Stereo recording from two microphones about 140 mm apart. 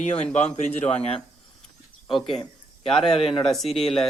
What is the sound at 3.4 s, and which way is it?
Speech, centre (ahead or behind).